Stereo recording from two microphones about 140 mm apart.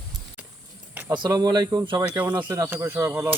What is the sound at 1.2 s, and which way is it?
Speech, 30° right (ahead or behind).